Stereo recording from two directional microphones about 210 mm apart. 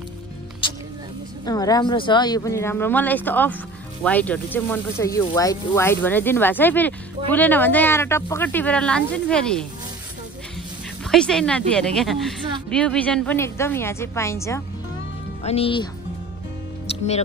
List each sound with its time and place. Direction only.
1.4 s speech: 15° left (ahead or behind)
11.1 s speech: 5° left (ahead or behind)
15.4 s speech: 30° left (ahead or behind)